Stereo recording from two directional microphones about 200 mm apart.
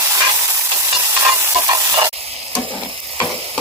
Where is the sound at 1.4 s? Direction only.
15° right (ahead or behind).